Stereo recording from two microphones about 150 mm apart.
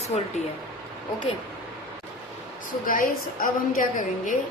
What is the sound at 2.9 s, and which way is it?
A woman's voice, 70° left (ahead or behind).